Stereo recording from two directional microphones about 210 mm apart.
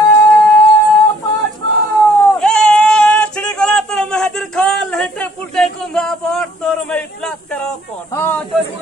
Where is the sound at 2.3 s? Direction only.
5° left (ahead or behind).